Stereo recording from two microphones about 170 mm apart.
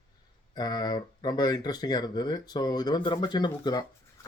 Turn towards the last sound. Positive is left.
turn(degrees=25)  # may be behind; listen again after turning